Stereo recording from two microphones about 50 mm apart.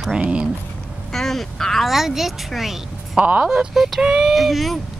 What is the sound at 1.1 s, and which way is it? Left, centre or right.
Speech, centre.